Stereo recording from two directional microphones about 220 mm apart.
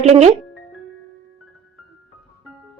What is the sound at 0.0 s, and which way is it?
Speech, 30° right (ahead or behind).